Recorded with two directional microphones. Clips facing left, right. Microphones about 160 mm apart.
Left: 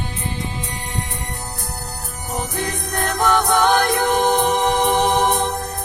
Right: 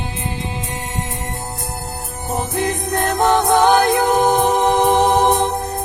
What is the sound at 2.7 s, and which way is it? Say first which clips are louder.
Music: right 4 dB; 25° right (ahead or behind).